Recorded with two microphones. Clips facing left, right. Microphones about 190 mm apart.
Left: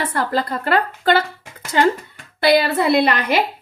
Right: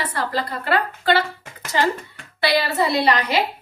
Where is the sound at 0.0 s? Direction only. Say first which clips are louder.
Left 4 dB; 50° left (ahead or behind).